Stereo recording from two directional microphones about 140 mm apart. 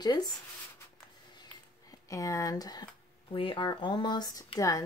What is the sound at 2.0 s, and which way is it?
Speech, 25° left (ahead or behind).